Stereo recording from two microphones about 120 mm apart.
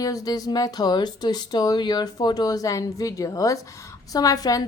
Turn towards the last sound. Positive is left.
turn(degrees=30)  # may be behind; listen again after turning